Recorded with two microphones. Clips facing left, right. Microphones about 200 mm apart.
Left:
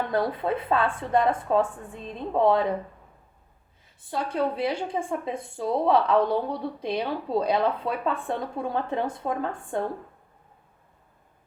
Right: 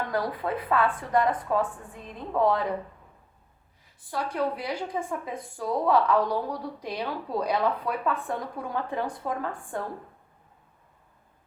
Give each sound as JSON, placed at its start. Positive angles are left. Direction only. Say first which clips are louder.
{"t": 0.1, "sound": "a woman's voice", "louder": "left 3 dB", "side_deg": 25}
{"t": 4.0, "sound": "a woman's voice", "louder": "left 2 dB", "side_deg": 25}